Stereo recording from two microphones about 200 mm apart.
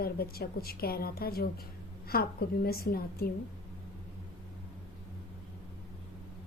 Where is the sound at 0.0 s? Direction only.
50° left (ahead or behind).